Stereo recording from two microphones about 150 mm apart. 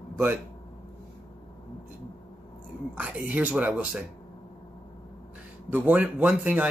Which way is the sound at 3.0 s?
10° right (ahead or behind).